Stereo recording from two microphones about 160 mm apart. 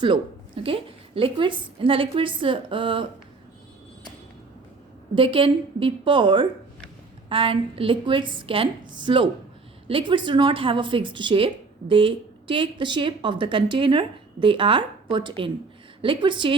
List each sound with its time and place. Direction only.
0.0 s a woman's voice: 30° right (ahead or behind)
5.1 s a woman's voice: 35° right (ahead or behind)